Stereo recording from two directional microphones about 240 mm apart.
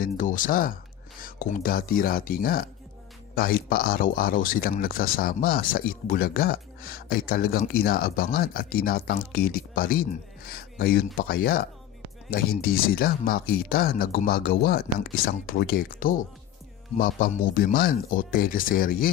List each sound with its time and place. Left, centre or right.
0.0 s speech: left